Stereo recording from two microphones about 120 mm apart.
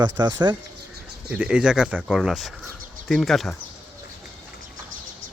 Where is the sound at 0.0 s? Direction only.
35° right (ahead or behind).